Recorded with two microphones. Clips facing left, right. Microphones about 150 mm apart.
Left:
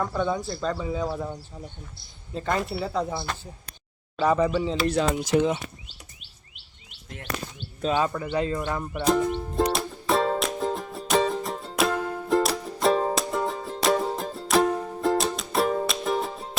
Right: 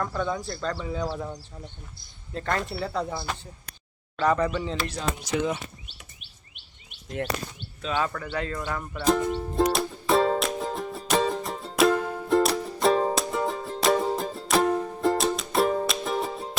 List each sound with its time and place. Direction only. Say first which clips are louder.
0.0 s speech: left 2 dB; 10° left (ahead or behind)
4.2 s speech: left 2 dB; 10° left (ahead or behind)
4.9 s speech: left 7 dB; 70° left (ahead or behind)
7.9 s speech: left 2 dB; 15° left (ahead or behind)
9.4 s music: right 1 dB; centre (ahead or behind)